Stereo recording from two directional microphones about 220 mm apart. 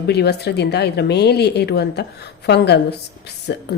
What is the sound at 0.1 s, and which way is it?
Speech, 50° left (ahead or behind).